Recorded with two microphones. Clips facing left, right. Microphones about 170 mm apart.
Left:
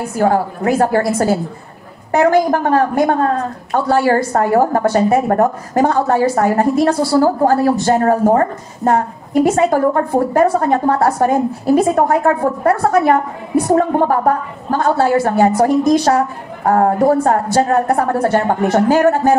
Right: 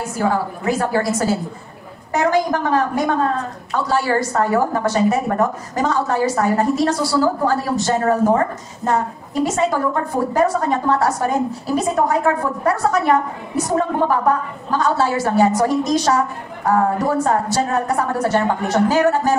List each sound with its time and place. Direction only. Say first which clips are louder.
0.2 s a woman's voice: left 6 dB; 50° left (ahead or behind)